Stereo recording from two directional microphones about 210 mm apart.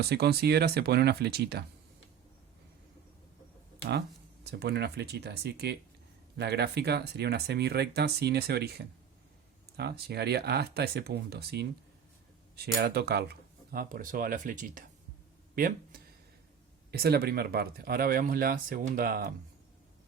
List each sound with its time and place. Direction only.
0.0 s speech: 50° right (ahead or behind)
4.5 s speech: 50° right (ahead or behind)